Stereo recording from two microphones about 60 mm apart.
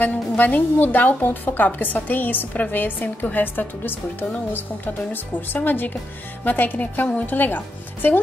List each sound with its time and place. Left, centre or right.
0.0 s a woman's voice: left